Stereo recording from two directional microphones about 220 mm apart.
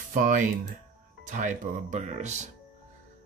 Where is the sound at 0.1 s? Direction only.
35° right (ahead or behind).